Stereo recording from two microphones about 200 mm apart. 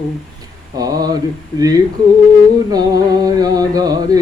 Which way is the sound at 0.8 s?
20° right (ahead or behind).